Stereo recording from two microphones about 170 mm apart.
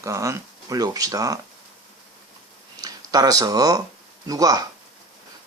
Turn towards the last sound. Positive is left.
turn(degrees=-20)  # may be behind; listen again after turning